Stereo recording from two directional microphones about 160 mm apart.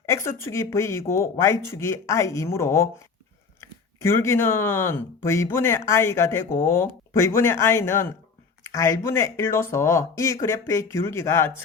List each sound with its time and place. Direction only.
0.0 s speech: 15° left (ahead or behind)